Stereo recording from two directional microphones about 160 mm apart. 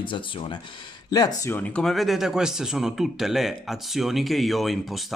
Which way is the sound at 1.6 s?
5° left (ahead or behind).